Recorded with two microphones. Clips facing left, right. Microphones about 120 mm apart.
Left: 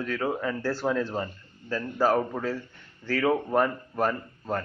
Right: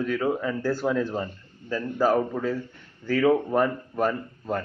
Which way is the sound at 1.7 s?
10° right (ahead or behind).